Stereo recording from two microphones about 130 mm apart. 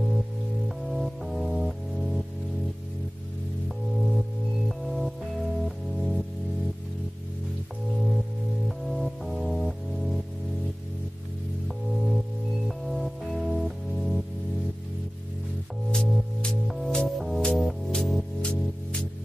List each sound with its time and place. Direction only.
0.7 s music: centre (ahead or behind)
3.6 s music: centre (ahead or behind)
8.6 s music: centre (ahead or behind)
11.6 s music: centre (ahead or behind)
15.9 s music: 5° left (ahead or behind)